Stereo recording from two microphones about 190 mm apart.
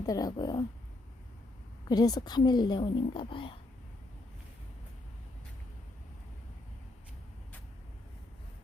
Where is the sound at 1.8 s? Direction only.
20° left (ahead or behind).